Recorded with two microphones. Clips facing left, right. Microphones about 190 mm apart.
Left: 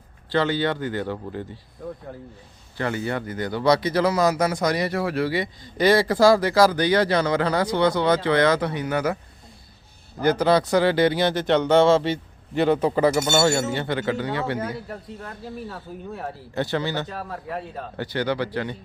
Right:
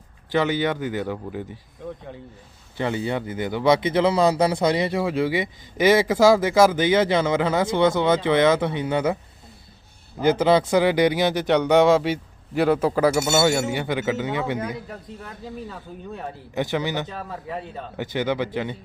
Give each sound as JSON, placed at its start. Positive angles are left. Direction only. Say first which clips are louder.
{"t": 0.3, "sound": "speech", "louder": "right 1 dB", "side_deg": -15}
{"t": 2.7, "sound": "speech", "louder": "right 1 dB", "side_deg": -20}
{"t": 10.2, "sound": "speech", "louder": "right 1 dB", "side_deg": -20}
{"t": 13.6, "sound": "speech", "louder": "even", "side_deg": -15}
{"t": 15.7, "sound": "a man's voice", "louder": "left 1 dB", "side_deg": 5}
{"t": 16.6, "sound": "speech", "louder": "right 1 dB", "side_deg": -15}
{"t": 17.1, "sound": "a man's voice", "louder": "even", "side_deg": 0}
{"t": 17.9, "sound": "speech", "louder": "right 1 dB", "side_deg": -20}